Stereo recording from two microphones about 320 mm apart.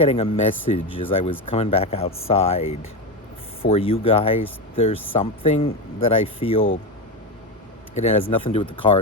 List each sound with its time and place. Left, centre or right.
0.0 s speech: centre
7.9 s speech: centre